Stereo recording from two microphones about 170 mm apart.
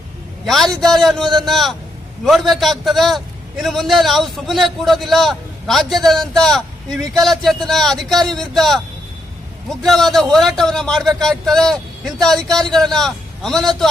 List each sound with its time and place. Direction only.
0.4 s a man's voice: centre (ahead or behind)